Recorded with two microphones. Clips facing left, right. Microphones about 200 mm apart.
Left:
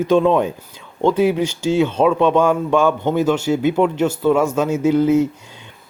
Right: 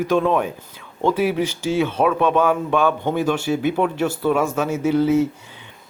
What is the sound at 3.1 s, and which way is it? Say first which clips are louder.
Speech: left 3 dB; 20° left (ahead or behind).